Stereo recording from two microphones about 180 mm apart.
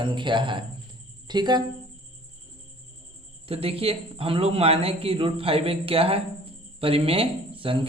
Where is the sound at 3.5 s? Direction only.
30° right (ahead or behind).